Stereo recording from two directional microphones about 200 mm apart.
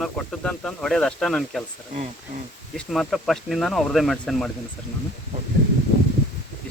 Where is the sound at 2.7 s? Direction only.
Centre (ahead or behind).